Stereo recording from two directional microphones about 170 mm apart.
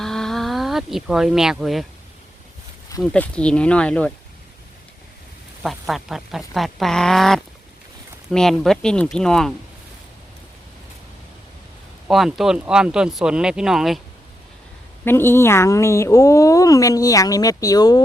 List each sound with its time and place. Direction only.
0.0 s a sound: 5° left (ahead or behind)
3.0 s speech: 5° left (ahead or behind)
5.6 s speech: centre (ahead or behind)
12.0 s speech: centre (ahead or behind)
15.0 s a woman's voice: 15° left (ahead or behind)